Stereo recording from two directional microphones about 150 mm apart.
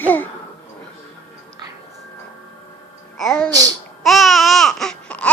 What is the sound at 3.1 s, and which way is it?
Music, 5° left (ahead or behind).